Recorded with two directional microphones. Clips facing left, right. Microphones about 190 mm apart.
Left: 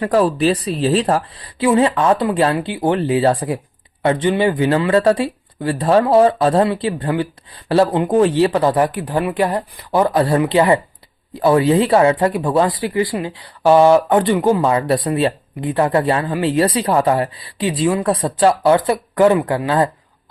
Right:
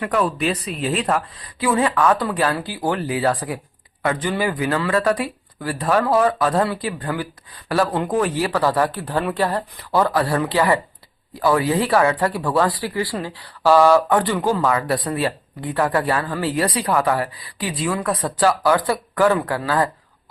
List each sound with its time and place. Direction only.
0.0 s speech: 35° left (ahead or behind)